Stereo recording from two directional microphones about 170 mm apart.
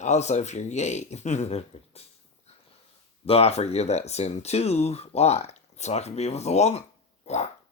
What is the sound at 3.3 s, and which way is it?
Speech, 35° left (ahead or behind).